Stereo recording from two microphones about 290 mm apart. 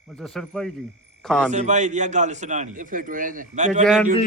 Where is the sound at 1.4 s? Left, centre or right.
Right.